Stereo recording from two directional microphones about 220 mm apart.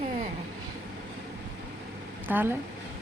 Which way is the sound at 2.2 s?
10° right (ahead or behind).